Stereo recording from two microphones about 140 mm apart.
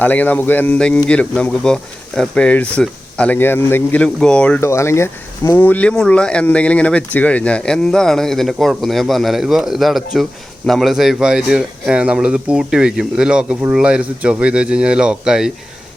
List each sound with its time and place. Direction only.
0.0 s speech: 10° left (ahead or behind)
4.6 s speech: 20° left (ahead or behind); by 15.5 s 5° right (ahead or behind)